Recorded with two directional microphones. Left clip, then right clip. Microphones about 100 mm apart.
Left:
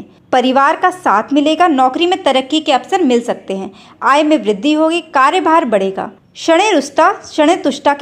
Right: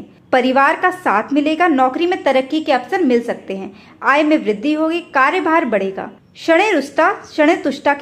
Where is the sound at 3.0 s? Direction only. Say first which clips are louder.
Left 2 dB; 40° left (ahead or behind).